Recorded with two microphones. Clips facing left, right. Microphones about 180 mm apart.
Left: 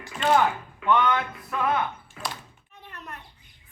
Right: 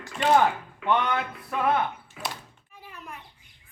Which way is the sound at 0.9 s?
30° right (ahead or behind).